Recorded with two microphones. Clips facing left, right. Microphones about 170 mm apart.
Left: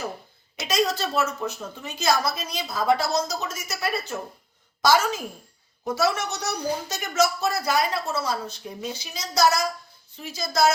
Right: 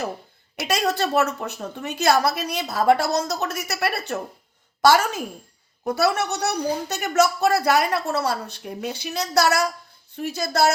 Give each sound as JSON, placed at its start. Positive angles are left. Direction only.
{"t": 0.6, "sound": "a woman's voice", "side_deg": -65}